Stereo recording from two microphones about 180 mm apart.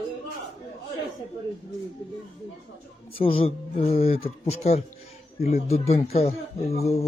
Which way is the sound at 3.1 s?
30° left (ahead or behind).